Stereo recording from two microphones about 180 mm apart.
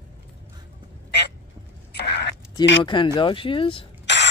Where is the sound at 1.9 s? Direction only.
65° left (ahead or behind).